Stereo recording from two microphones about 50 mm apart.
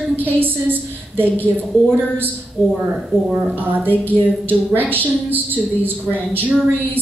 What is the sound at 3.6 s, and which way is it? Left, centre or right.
A woman's voice, right.